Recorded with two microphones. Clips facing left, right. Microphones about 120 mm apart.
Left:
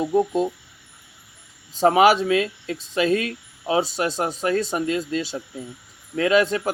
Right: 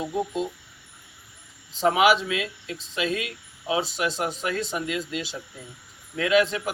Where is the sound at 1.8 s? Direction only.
40° left (ahead or behind).